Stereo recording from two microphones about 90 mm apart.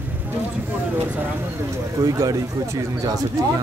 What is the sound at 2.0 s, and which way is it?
Speech, 40° right (ahead or behind).